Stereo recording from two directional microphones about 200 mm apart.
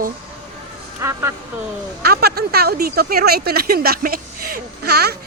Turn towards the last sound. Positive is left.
turn(degrees=-50)  # may be behind; listen again after turning